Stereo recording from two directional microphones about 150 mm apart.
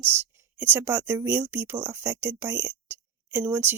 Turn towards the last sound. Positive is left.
turn(degrees=-15)  # may be behind; listen again after turning